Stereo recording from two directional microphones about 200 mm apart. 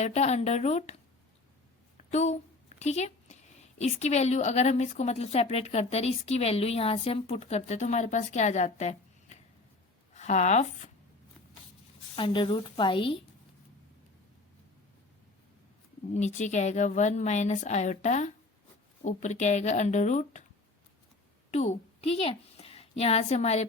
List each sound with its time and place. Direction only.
0.0 s a woman's voice: 35° left (ahead or behind)
2.0 s a woman's voice: 35° left (ahead or behind)
12.1 s a woman's voice: 25° left (ahead or behind)
16.1 s a woman's voice: 35° left (ahead or behind)
21.5 s a woman's voice: 35° left (ahead or behind)